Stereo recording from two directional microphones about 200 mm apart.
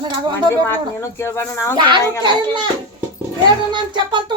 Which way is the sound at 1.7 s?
20° right (ahead or behind).